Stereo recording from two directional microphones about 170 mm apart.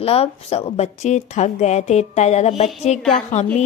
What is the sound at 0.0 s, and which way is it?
A woman's voice, 35° left (ahead or behind).